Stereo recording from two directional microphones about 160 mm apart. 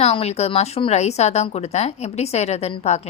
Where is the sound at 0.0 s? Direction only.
40° left (ahead or behind).